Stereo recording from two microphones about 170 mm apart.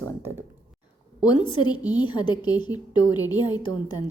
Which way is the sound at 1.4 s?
25° left (ahead or behind).